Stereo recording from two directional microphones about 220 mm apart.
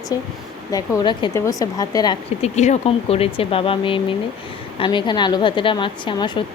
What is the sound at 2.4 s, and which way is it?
A woman's voice, 30° left (ahead or behind).